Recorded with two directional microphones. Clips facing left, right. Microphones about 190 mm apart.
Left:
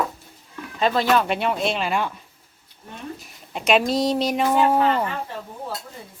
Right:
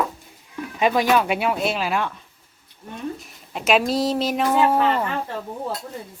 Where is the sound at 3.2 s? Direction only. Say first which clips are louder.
Even; centre (ahead or behind).